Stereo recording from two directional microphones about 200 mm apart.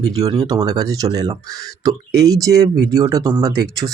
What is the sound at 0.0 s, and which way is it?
Speech, 20° right (ahead or behind).